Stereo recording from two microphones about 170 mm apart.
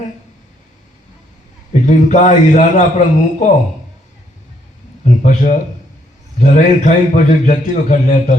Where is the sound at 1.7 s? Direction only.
45° left (ahead or behind).